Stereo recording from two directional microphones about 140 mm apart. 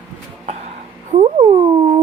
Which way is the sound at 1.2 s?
50° right (ahead or behind).